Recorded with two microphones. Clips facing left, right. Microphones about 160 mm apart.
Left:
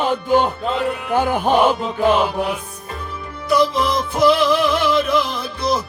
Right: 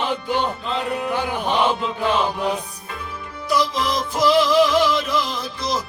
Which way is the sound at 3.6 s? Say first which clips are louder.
Left 4 dB; 60° left (ahead or behind).